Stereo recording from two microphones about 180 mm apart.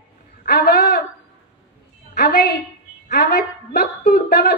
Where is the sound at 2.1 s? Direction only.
65° left (ahead or behind).